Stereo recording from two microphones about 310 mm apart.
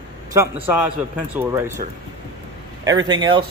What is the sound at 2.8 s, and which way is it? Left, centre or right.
Speech, centre.